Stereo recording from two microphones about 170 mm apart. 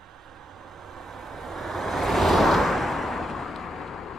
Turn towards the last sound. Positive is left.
turn(degrees=0)  # may be behind; listen again after turning